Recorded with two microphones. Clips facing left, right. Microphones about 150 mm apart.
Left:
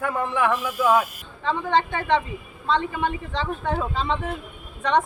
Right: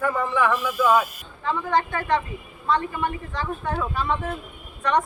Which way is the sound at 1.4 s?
25° left (ahead or behind).